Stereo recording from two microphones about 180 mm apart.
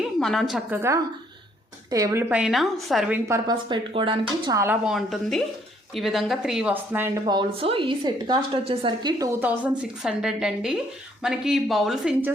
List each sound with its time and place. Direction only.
0.2 s a woman's voice: centre (ahead or behind)
1.9 s a woman's voice: 20° right (ahead or behind)
2.3 s a woman's voice: 5° right (ahead or behind)
3.2 s a woman's voice: 20° right (ahead or behind)
4.6 s a woman's voice: 5° right (ahead or behind)
7.3 s a woman's voice: 30° right (ahead or behind)
9.5 s a woman's voice: 5° right (ahead or behind)